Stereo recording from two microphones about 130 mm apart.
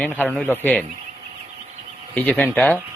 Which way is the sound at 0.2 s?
10° left (ahead or behind).